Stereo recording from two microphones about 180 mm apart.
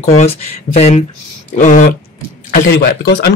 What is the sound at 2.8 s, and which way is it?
Speech, 65° left (ahead or behind).